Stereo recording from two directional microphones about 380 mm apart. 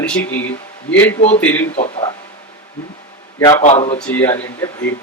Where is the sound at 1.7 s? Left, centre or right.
Centre.